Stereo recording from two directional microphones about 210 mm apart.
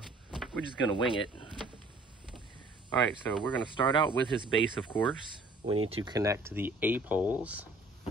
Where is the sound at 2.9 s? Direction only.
5° left (ahead or behind).